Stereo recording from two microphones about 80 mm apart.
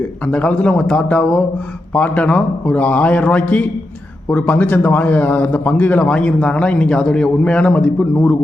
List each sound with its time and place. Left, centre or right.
0.3 s a man's voice: centre